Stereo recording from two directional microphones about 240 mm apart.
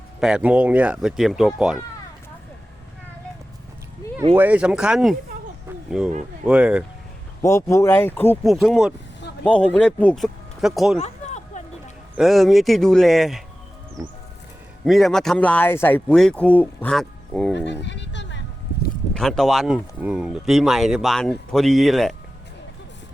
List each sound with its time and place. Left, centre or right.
0.2 s speech: centre
4.4 s speech: centre
5.6 s a sound: centre
6.4 s speech: centre
7.4 s speech: centre
11.0 s a sound: left
12.1 s speech: centre
14.8 s speech: centre
17.7 s a sound: left
19.1 s speech: centre